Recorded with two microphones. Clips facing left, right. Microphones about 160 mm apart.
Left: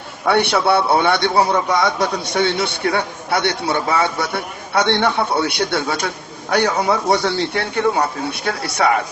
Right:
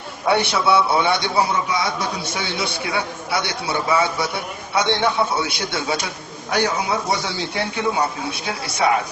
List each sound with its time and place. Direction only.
0.3 s a man's voice: 60° left (ahead or behind)